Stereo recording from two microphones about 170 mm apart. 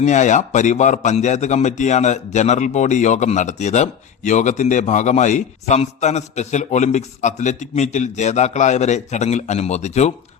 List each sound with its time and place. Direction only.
0.0 s a man's voice: 45° left (ahead or behind)